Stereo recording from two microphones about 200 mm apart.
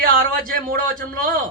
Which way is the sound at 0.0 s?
45° right (ahead or behind).